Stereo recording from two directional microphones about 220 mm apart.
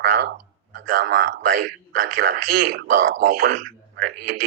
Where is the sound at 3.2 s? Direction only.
40° right (ahead or behind).